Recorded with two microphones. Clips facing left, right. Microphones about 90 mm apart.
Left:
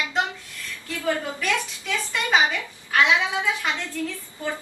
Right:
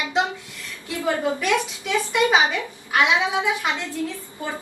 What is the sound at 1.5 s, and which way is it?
A woman's voice, 20° right (ahead or behind).